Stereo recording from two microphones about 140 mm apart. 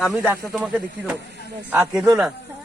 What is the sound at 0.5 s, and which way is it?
Speech, 5° right (ahead or behind).